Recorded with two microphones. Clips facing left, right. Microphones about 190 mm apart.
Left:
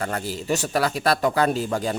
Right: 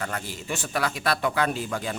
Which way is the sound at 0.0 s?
35° left (ahead or behind).